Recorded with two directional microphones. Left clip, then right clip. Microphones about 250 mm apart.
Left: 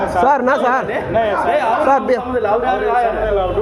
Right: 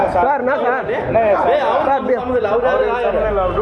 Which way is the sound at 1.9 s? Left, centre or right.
Left.